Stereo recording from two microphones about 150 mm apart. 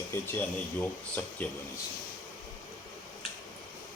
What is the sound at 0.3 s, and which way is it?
Speech, 15° left (ahead or behind).